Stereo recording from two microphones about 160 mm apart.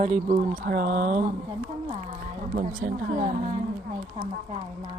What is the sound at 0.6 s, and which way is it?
Speech, 70° right (ahead or behind).